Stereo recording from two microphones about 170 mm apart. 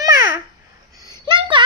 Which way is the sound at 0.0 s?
20° right (ahead or behind).